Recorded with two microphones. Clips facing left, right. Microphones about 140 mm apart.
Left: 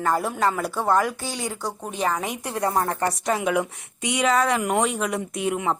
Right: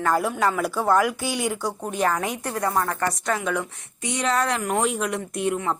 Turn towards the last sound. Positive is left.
turn(degrees=0)  # may be behind; listen again after turning